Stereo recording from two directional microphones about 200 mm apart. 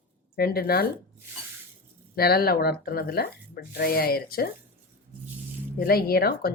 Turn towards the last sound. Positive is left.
turn(degrees=50)  # may be behind; listen again after turning